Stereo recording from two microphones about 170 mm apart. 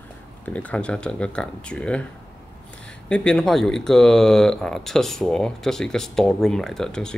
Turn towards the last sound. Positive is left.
turn(degrees=5)  # may be behind; listen again after turning